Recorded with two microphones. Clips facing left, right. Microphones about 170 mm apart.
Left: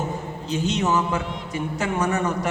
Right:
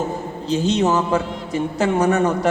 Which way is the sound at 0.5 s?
35° right (ahead or behind).